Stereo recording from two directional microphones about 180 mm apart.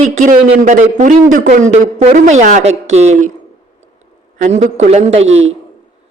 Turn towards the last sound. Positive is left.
turn(degrees=-90)